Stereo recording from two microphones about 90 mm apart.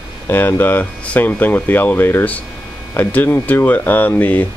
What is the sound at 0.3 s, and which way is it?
Speech, 25° left (ahead or behind).